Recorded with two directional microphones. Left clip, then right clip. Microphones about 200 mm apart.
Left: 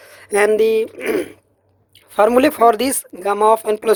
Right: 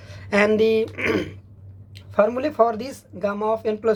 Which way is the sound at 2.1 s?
55° left (ahead or behind).